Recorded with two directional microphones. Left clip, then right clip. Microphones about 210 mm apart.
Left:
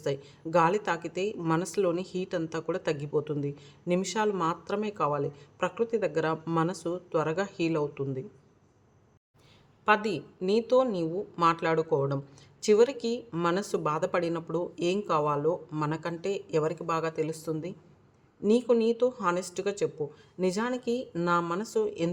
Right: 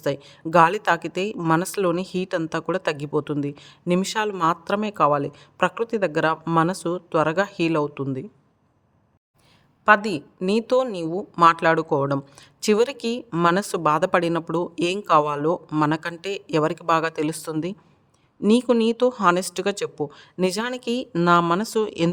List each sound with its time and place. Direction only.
0.0 s a woman's voice: 40° right (ahead or behind)
9.8 s a woman's voice: 35° right (ahead or behind)